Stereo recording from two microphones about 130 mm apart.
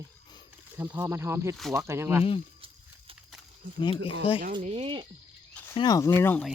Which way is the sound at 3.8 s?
40° left (ahead or behind).